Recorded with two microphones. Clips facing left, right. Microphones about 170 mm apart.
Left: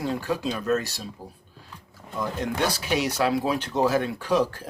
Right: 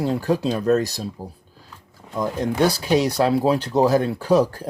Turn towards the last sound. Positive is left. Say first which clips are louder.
# right 6 dB
turn(degrees=-40)  # may be behind; listen again after turning